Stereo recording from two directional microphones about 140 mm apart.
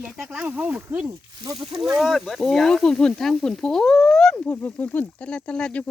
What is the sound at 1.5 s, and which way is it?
Speech, 35° right (ahead or behind).